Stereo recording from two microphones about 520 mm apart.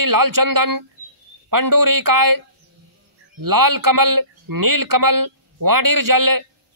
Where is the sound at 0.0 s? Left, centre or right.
Right.